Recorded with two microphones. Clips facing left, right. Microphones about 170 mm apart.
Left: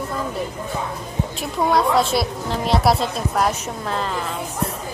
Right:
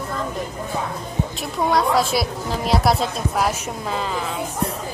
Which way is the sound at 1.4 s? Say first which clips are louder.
Left 1 dB; centre (ahead or behind).